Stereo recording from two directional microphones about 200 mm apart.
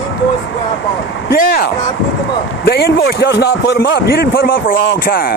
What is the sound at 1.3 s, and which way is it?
Speech, 55° left (ahead or behind).